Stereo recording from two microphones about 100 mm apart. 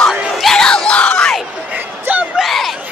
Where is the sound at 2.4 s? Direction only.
Centre (ahead or behind).